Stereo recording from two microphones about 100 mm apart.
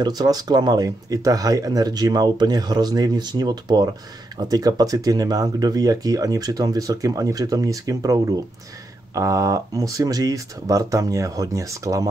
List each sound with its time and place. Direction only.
0.0 s speech: 40° right (ahead or behind)